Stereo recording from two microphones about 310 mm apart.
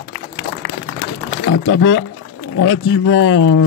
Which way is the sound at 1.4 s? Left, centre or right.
Left.